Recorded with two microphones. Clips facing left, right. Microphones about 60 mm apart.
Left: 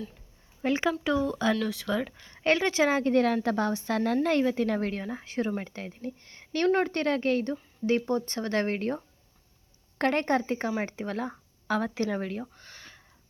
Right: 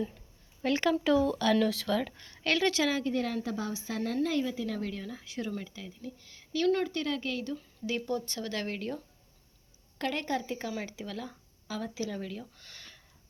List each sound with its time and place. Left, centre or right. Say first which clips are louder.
0.6 s a woman's voice: left 2 dB; left
1.0 s speech: even; centre
2.3 s speech: left 3 dB; left
3.0 s a woman's voice: left 7 dB; left
12.5 s a sound: left 3 dB; left